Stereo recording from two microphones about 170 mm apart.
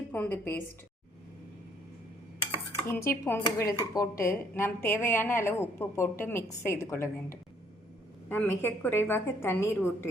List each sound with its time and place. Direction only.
0.1 s a woman's voice: 10° left (ahead or behind)
2.8 s a woman's voice: 15° left (ahead or behind)